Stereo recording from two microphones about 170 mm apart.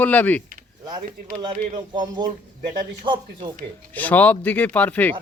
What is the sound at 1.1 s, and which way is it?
Speech, 50° right (ahead or behind).